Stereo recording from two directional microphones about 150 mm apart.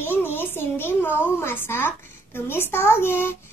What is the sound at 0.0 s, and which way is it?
A woman's voice, 15° left (ahead or behind).